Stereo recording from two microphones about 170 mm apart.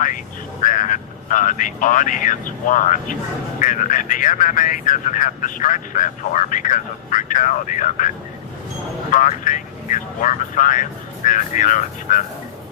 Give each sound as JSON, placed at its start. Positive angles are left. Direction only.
{"t": 0.6, "sound": "speech", "side_deg": 50}
{"t": 9.1, "sound": "speech", "side_deg": 50}